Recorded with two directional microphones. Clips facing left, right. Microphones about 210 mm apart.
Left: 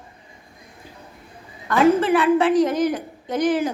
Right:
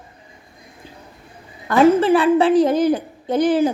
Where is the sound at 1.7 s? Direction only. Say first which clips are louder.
Right 3 dB; 30° right (ahead or behind).